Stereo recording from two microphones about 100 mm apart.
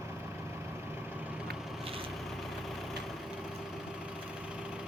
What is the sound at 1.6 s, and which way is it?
Vehicle, 5° right (ahead or behind).